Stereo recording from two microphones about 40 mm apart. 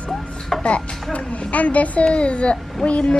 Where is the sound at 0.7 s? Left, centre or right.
Left.